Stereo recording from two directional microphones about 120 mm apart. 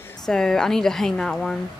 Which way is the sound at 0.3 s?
5° left (ahead or behind).